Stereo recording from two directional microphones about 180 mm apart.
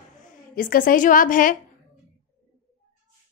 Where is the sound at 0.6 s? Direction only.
50° left (ahead or behind).